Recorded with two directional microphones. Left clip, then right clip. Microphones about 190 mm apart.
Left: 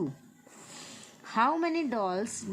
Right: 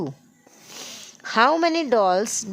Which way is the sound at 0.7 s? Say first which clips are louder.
Right 11 dB; 50° right (ahead or behind).